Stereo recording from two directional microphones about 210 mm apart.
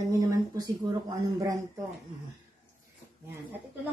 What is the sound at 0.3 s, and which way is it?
Speech, 20° right (ahead or behind).